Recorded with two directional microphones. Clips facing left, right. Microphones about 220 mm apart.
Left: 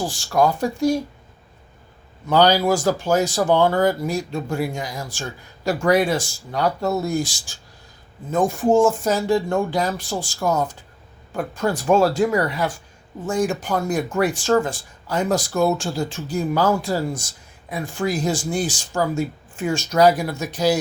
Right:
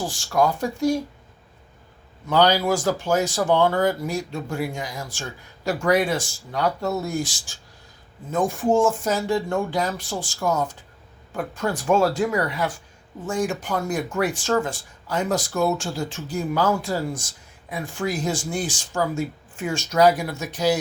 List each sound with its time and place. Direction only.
0.1 s speech: 35° left (ahead or behind)
2.3 s speech: 35° left (ahead or behind)